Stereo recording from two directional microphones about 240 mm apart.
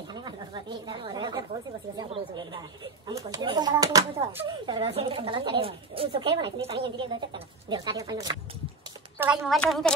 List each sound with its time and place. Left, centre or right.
0.1 s speech: centre
9.2 s a woman's voice: centre